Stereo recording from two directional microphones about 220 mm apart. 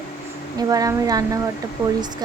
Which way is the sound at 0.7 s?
15° right (ahead or behind).